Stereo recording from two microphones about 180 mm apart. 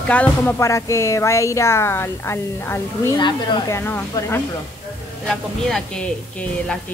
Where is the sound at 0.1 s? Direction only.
10° left (ahead or behind).